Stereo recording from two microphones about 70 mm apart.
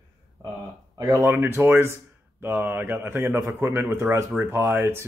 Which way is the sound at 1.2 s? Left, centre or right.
Right.